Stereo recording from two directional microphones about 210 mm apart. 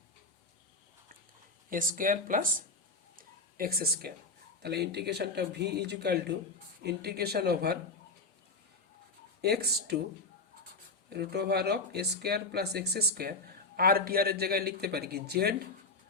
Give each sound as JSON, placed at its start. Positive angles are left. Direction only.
{"t": 1.7, "sound": "speech", "side_deg": -40}
{"t": 3.2, "sound": "a sound", "side_deg": -45}
{"t": 4.6, "sound": "speech", "side_deg": -50}
{"t": 9.4, "sound": "speech", "side_deg": -50}
{"t": 11.1, "sound": "speech", "side_deg": -50}